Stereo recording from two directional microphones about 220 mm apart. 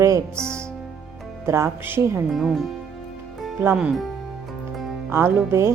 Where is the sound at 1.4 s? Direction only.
10° right (ahead or behind).